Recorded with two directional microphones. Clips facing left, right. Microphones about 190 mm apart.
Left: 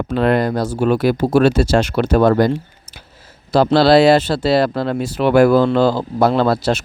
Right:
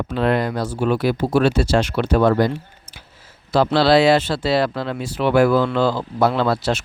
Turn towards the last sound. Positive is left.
turn(degrees=40)  # may be behind; listen again after turning